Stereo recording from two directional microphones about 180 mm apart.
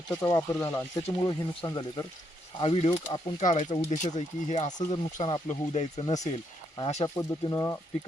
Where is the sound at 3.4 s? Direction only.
45° left (ahead or behind).